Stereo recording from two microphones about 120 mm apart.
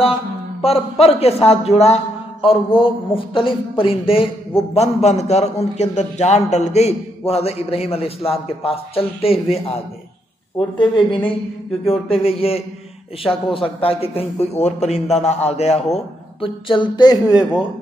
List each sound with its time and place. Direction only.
0.7 s a man's voice: 55° left (ahead or behind)
2.4 s a man's voice: 50° left (ahead or behind)
10.8 s speech: 40° left (ahead or behind)
11.8 s speech: 55° left (ahead or behind); by 17.5 s 35° left (ahead or behind)